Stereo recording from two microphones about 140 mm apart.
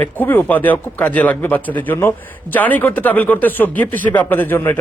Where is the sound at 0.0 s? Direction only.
15° left (ahead or behind).